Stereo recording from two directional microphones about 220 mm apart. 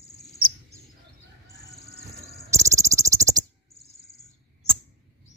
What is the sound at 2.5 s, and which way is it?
Cricket, 15° right (ahead or behind).